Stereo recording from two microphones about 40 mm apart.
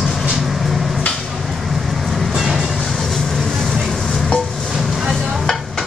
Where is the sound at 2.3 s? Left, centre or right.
Centre.